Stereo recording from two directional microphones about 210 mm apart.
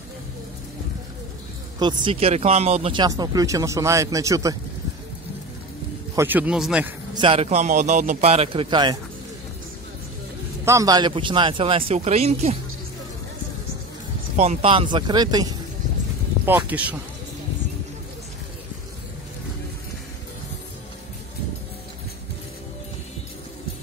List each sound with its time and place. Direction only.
1.8 s speech: 25° right (ahead or behind)
6.1 s speech: 10° right (ahead or behind)
7.2 s a man's voice: 25° right (ahead or behind)
10.6 s a man's voice: 15° right (ahead or behind); by 12.5 s 30° right (ahead or behind)
14.3 s a man's voice: 30° right (ahead or behind)
16.4 s speech: 10° right (ahead or behind)